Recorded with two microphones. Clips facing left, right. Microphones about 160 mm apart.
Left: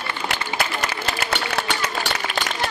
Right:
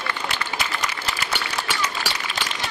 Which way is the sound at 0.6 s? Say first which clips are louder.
Left 3 dB; 60° left (ahead or behind).